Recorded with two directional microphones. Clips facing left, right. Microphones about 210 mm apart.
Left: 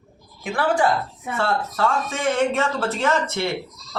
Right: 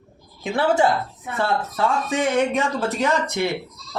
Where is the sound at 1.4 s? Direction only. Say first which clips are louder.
Even; 15° right (ahead or behind).